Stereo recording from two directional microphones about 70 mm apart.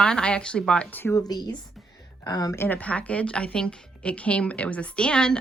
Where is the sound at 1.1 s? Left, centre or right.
Left.